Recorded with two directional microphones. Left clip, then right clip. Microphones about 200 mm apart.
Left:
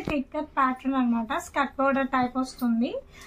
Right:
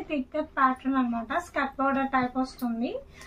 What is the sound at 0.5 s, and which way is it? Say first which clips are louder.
A woman's voice: even; 55° left (ahead or behind).